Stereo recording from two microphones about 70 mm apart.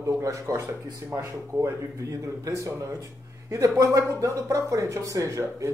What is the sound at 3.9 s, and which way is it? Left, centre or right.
Speech, right.